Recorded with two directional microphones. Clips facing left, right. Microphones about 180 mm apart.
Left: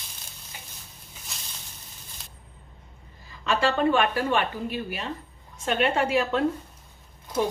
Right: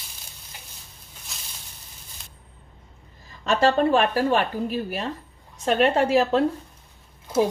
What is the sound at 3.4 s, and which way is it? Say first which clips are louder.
A woman's voice: right 3 dB; 40° right (ahead or behind).